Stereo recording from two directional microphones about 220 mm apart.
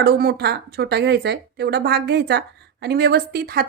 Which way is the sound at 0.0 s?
45° right (ahead or behind).